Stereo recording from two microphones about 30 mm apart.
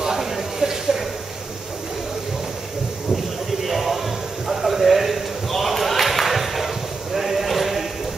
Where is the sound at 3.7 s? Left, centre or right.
Centre.